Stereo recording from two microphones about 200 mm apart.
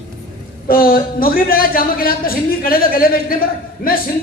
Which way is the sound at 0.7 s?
45° left (ahead or behind).